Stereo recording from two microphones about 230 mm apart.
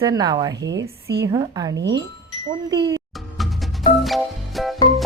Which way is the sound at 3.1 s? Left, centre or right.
Centre.